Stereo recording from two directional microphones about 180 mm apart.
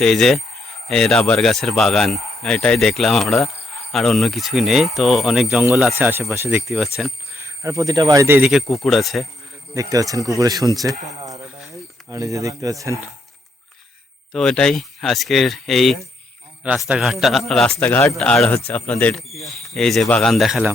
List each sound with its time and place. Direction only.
0.0 s speech: centre (ahead or behind)
6.0 s speech: 10° right (ahead or behind)
6.7 s speech: centre (ahead or behind)
7.4 s speech: 15° right (ahead or behind)
8.4 s speech: centre (ahead or behind)
9.7 s speech: 20° right (ahead or behind)
14.3 s speech: 5° left (ahead or behind)
17.8 s speech: 15° left (ahead or behind)
18.1 s speech: centre (ahead or behind)